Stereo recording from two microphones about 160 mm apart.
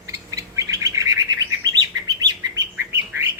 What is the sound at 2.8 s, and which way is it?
Bird, 15° right (ahead or behind).